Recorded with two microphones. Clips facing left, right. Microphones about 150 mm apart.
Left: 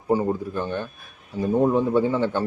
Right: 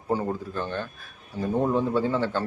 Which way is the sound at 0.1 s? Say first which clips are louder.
Left 5 dB; 15° left (ahead or behind).